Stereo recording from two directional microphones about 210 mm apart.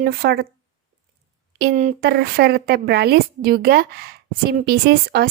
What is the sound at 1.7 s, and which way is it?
Speech, 35° right (ahead or behind).